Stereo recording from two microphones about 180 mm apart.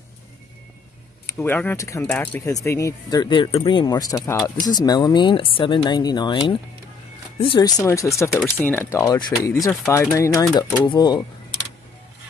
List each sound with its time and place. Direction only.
1.2 s speech: 10° left (ahead or behind)